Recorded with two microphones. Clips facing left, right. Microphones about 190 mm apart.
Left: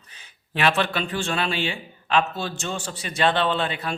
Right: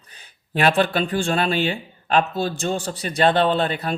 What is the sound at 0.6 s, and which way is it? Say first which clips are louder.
Speech: right 4 dB; 40° right (ahead or behind).